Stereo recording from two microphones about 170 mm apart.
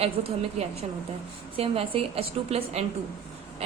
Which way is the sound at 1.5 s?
35° right (ahead or behind).